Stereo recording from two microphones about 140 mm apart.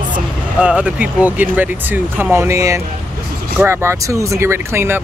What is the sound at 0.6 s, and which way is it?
Speech, 10° right (ahead or behind).